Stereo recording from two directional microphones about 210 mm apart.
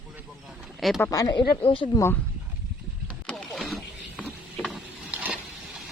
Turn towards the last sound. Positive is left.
turn(degrees=0)  # may be behind; listen again after turning